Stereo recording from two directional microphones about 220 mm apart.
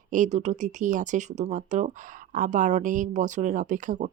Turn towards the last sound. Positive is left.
turn(degrees=-35)  # may be behind; listen again after turning